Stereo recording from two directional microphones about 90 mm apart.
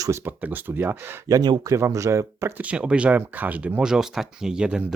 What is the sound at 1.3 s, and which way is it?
Speech, 50° right (ahead or behind).